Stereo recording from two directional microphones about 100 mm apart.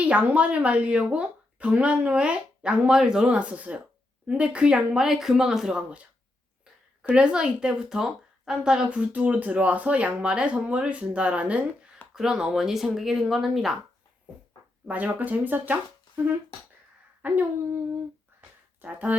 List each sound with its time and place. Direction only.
0.0 s speech: 15° right (ahead or behind)
7.1 s speech: 10° right (ahead or behind)
14.8 s speech: 15° right (ahead or behind)
17.2 s speech: 20° right (ahead or behind)
18.3 s a sound: 15° right (ahead or behind)